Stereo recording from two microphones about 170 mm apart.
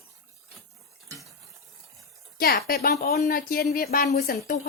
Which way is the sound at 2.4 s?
65° left (ahead or behind).